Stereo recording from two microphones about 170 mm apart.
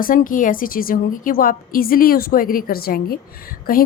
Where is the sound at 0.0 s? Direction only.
55° left (ahead or behind).